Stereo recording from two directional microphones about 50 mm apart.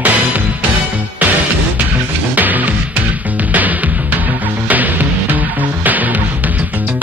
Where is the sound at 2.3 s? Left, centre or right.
Right.